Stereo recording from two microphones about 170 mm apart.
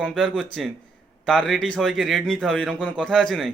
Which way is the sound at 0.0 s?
Centre (ahead or behind).